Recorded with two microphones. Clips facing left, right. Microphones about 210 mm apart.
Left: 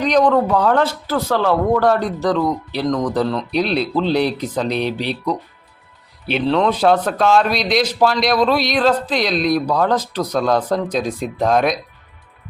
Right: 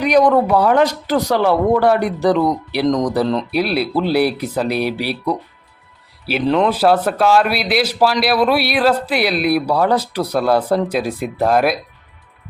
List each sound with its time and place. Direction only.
0.0 s a man's voice: 10° right (ahead or behind)